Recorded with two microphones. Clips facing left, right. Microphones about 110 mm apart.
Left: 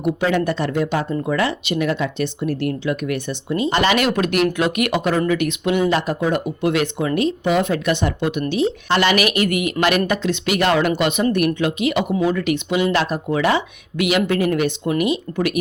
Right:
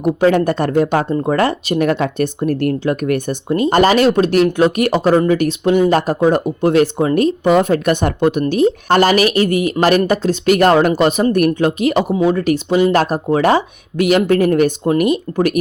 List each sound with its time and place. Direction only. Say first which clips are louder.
0.0 s speech: right 6 dB; 45° right (ahead or behind)